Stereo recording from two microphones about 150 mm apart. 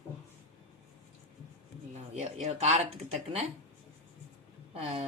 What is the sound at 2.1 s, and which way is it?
Speech, 45° right (ahead or behind).